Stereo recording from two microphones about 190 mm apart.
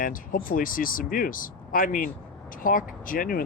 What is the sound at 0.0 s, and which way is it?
Speech, 50° left (ahead or behind).